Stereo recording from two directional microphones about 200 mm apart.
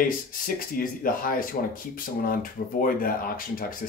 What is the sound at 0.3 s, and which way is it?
Speech, 45° left (ahead or behind).